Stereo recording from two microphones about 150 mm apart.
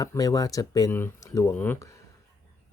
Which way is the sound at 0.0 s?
25° left (ahead or behind).